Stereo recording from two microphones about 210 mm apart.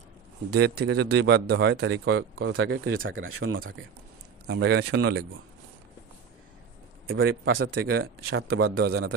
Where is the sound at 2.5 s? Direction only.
80° right.